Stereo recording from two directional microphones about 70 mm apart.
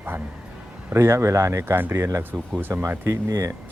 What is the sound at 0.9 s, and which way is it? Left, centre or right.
Speech, right.